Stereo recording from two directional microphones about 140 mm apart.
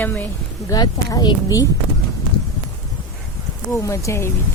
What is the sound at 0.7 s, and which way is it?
Speech, 30° left (ahead or behind).